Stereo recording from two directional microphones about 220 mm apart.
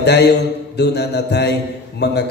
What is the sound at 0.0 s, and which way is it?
A man's voice, 50° left (ahead or behind).